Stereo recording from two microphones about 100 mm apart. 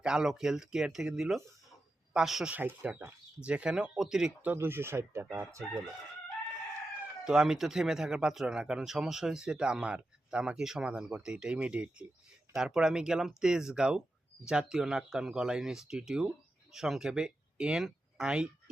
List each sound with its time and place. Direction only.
0.0 s speech: 5° right (ahead or behind)
2.5 s speech: 20° right (ahead or behind)
4.4 s speech: 25° right (ahead or behind)
7.3 s speech: 5° right (ahead or behind)